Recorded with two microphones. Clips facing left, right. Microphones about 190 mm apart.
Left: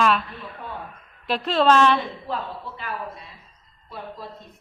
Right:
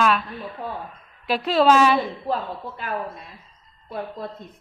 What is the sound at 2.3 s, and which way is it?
Speech, 40° right (ahead or behind).